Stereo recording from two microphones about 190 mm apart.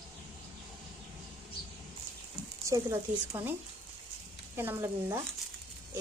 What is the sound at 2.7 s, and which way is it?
Speech, 15° right (ahead or behind).